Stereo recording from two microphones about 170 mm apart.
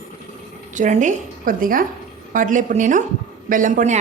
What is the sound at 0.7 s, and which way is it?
A woman's voice, 45° right (ahead or behind).